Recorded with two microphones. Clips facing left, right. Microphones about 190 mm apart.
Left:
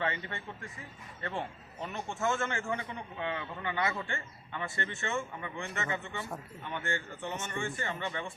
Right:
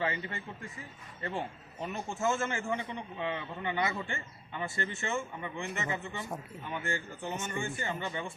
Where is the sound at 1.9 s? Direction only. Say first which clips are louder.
Right 1 dB; 30° right (ahead or behind).